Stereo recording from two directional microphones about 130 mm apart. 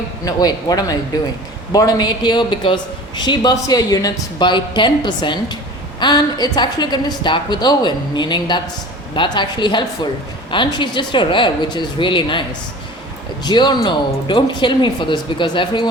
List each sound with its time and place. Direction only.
0.3 s a woman's voice: 30° left (ahead or behind)